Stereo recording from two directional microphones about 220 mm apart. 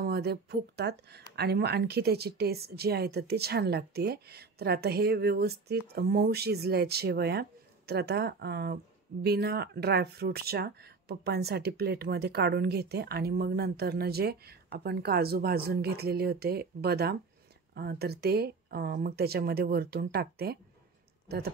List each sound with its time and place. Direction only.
0.0 s speech: 45° right (ahead or behind)